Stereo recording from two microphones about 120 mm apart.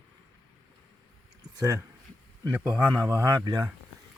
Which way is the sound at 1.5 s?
30° right (ahead or behind).